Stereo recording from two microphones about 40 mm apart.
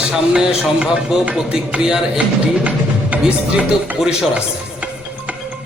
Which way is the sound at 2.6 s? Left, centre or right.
Right.